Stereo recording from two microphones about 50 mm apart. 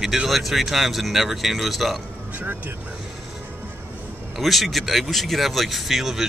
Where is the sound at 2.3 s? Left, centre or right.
Right.